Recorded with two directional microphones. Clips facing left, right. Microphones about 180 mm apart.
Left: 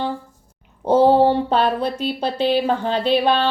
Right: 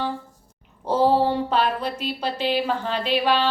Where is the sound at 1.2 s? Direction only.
30° left (ahead or behind).